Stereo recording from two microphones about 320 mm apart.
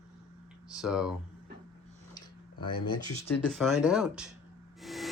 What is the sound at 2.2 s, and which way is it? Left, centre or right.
Tick-tock, centre.